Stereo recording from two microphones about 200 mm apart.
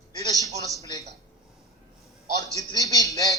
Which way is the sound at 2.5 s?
15° left (ahead or behind).